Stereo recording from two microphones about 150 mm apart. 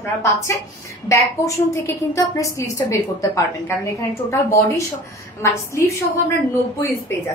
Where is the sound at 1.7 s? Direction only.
20° left (ahead or behind).